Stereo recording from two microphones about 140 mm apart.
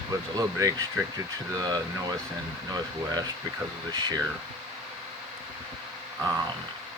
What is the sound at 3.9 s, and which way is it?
Speech, 30° right (ahead or behind).